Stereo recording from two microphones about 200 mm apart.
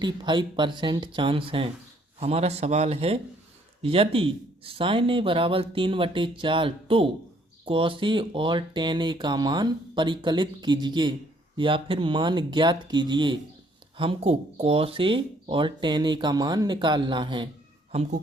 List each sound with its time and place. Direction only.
0.0 s speech: 25° right (ahead or behind)